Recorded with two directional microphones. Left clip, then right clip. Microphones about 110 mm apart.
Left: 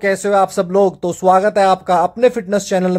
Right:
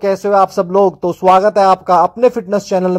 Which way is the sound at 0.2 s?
10° right (ahead or behind).